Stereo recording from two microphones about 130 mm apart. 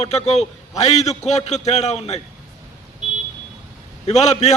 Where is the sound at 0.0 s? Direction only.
55° left (ahead or behind).